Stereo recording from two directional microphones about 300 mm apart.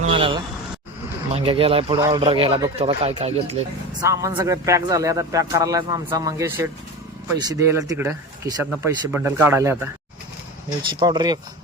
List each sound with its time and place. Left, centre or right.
0.0 s vehicle: centre
1.3 s speech: centre
11.0 s speech: centre